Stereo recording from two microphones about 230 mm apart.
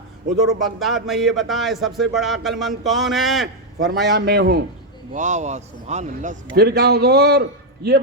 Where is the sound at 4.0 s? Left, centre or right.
Right.